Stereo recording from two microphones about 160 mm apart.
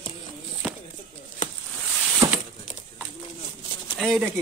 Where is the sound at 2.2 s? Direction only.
30° right (ahead or behind).